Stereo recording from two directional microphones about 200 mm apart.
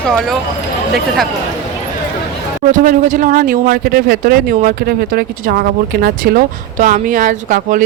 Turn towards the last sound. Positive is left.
turn(degrees=-40)  # may be behind; listen again after turning